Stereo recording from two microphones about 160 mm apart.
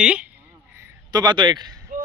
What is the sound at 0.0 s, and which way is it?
Speech, 5° right (ahead or behind).